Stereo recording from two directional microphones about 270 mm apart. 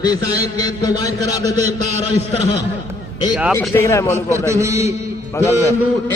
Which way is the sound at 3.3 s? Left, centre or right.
Centre.